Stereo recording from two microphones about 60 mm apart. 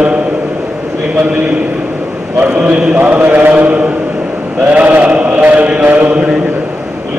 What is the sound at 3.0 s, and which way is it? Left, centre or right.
Mantra, right.